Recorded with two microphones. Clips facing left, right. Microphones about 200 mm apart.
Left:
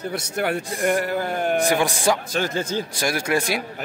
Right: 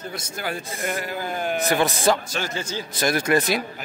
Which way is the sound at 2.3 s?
50° left (ahead or behind).